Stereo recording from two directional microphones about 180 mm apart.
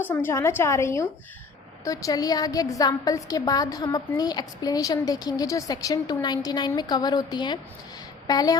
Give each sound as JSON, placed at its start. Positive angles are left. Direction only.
{"t": 0.0, "sound": "a woman's voice", "side_deg": 10}